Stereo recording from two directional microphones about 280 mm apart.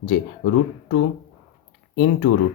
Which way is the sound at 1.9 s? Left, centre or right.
Left.